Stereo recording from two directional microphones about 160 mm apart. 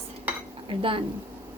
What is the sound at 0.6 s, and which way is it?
Speech, 35° right (ahead or behind).